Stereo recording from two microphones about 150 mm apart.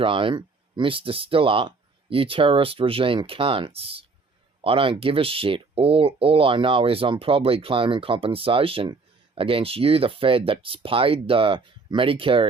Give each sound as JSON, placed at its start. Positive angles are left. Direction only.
{"t": 0.0, "sound": "speech", "side_deg": -35}